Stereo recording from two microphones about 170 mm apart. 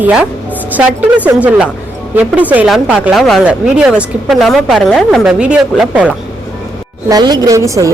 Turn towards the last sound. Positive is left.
turn(degrees=-20)  # may be behind; listen again after turning